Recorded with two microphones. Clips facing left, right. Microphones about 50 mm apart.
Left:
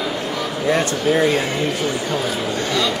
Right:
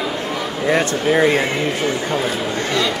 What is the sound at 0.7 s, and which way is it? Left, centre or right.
A man's voice, right.